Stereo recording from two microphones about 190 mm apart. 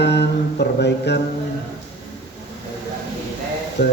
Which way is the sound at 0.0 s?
60° left (ahead or behind).